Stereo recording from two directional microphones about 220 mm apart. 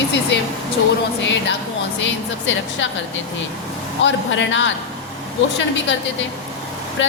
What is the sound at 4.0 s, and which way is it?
Speech, 55° left (ahead or behind).